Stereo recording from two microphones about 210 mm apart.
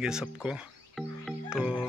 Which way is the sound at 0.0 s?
5° right (ahead or behind).